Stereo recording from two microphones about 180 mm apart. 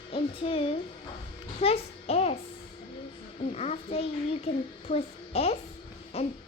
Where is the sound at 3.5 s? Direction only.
35° left (ahead or behind).